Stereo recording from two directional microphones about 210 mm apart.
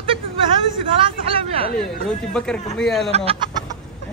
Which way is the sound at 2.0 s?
5° left (ahead or behind).